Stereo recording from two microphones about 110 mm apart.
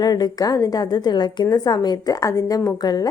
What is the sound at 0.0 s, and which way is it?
A woman's voice, 35° left (ahead or behind).